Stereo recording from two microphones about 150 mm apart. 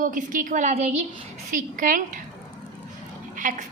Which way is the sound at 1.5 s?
60° right (ahead or behind).